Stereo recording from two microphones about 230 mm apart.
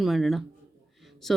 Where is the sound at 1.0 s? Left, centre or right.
Centre.